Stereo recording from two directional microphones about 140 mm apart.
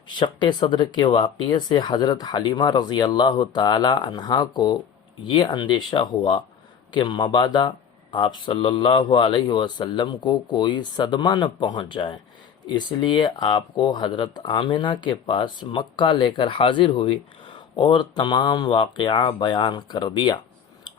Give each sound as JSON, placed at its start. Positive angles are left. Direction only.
{"t": 0.1, "sound": "speech", "side_deg": 35}